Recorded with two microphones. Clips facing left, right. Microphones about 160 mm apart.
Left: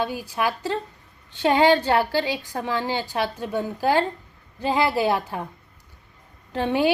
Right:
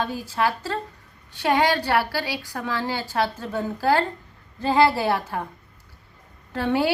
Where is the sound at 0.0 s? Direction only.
15° left (ahead or behind).